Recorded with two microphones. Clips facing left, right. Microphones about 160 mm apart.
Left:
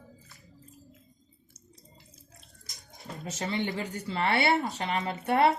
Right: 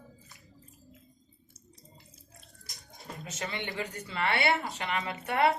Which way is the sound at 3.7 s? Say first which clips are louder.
Left 3 dB; 30° left (ahead or behind).